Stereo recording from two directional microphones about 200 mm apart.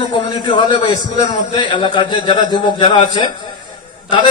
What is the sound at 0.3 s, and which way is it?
A man's voice, 20° left (ahead or behind).